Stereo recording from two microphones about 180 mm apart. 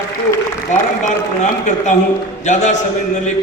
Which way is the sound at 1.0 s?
45° left (ahead or behind).